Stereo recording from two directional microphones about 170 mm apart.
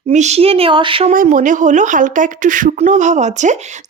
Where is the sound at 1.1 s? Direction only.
50° right (ahead or behind).